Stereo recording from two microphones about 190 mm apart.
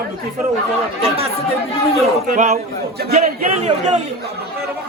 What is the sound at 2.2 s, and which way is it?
A man's voice, 45° right (ahead or behind).